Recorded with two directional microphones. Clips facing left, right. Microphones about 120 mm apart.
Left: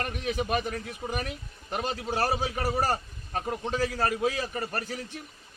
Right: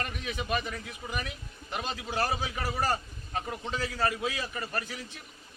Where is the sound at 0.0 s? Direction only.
40° left (ahead or behind).